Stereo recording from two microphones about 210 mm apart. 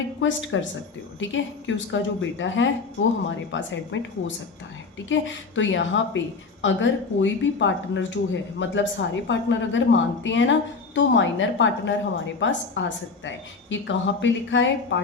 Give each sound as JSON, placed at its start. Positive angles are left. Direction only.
{"t": 0.2, "sound": "speech", "side_deg": 65}